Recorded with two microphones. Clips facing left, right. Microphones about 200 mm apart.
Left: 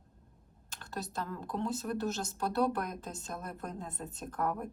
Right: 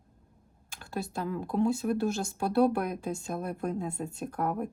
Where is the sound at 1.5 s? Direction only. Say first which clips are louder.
Right 8 dB; 65° right (ahead or behind).